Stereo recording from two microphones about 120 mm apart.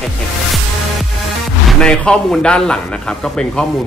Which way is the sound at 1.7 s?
5° left (ahead or behind).